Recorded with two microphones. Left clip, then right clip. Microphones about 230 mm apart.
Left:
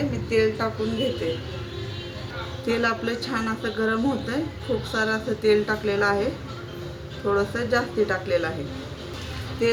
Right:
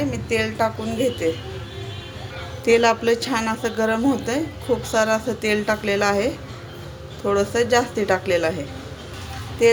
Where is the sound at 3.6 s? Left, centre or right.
Right.